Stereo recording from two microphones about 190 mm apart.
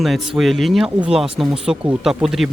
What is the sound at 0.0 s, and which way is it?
Speech, centre (ahead or behind).